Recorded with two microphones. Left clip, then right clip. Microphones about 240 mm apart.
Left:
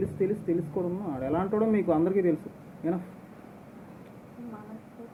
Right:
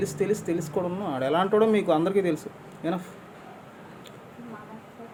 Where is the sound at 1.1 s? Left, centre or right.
Right.